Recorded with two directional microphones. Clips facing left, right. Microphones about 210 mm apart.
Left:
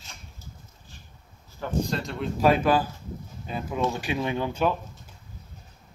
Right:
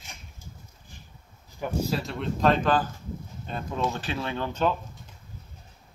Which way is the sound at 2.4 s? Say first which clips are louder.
Left 2 dB; 10° left (ahead or behind).